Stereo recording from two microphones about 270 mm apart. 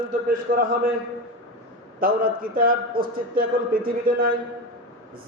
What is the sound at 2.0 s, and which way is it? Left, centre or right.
A man's voice, right.